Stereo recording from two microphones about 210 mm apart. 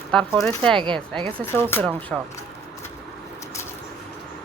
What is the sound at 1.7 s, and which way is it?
Speech, 5° left (ahead or behind).